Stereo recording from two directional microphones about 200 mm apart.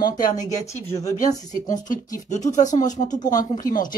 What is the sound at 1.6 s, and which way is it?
Speech, 40° left (ahead or behind).